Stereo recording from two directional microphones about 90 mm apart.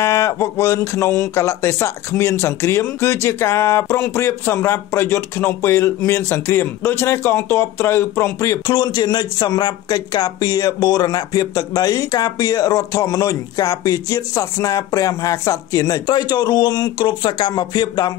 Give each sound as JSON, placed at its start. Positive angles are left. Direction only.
{"t": 0.0, "sound": "speech", "side_deg": 35}